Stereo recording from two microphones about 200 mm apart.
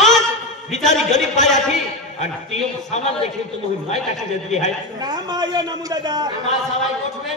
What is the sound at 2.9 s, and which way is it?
Speech, 35° left (ahead or behind).